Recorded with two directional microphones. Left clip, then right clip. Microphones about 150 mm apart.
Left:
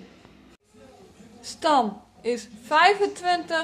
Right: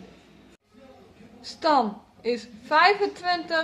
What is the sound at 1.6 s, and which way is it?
A woman's voice, 10° left (ahead or behind).